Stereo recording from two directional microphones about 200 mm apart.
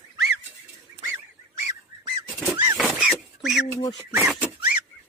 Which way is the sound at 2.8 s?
Centre (ahead or behind).